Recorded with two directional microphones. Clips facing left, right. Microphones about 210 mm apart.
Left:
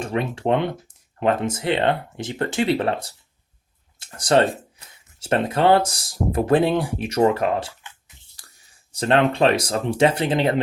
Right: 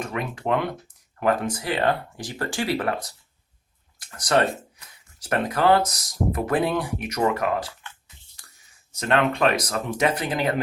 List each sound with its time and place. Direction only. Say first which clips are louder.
0.0 s speech: left 5 dB; 30° left (ahead or behind)